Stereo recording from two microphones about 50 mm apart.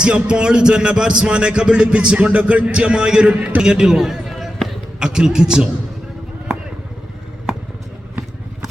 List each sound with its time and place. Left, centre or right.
0.3 s speech: centre
3.6 s basketball bounce: centre
4.9 s a man's voice: centre